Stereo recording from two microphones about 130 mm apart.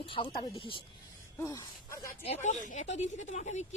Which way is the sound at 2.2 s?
60° left (ahead or behind).